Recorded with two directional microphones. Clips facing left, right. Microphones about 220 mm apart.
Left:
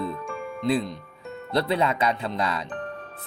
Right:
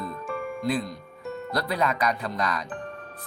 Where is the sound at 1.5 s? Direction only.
25° left (ahead or behind).